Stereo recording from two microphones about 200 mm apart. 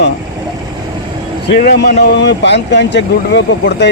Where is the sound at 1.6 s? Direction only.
55° left (ahead or behind).